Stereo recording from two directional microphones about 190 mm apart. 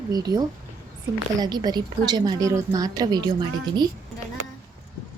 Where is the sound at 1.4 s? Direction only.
20° right (ahead or behind).